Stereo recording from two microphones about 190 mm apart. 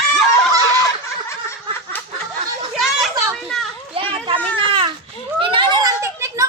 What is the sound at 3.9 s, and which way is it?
Children playing, 25° right (ahead or behind).